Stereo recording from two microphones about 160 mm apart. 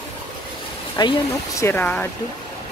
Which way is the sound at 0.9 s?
25° left (ahead or behind).